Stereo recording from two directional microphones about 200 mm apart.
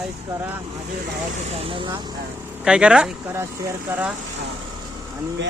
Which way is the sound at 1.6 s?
25° right (ahead or behind).